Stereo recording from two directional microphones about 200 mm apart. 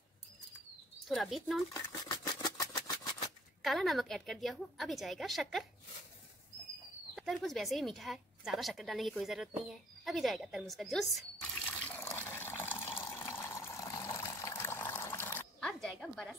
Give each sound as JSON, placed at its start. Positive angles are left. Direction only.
{"t": 1.0, "sound": "speech", "side_deg": 0}
{"t": 1.7, "sound": "a sound", "side_deg": 20}
{"t": 3.6, "sound": "speech", "side_deg": 0}
{"t": 7.2, "sound": "speech", "side_deg": 0}
{"t": 11.8, "sound": "water", "side_deg": 10}
{"t": 15.6, "sound": "a sound", "side_deg": 0}